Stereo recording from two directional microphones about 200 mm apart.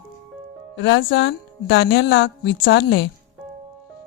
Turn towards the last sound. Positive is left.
turn(degrees=65)  # may be behind; listen again after turning